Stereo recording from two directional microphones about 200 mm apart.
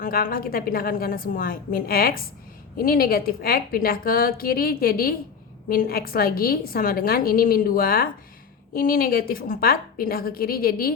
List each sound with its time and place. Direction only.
0.0 s a woman's voice: 45° left (ahead or behind)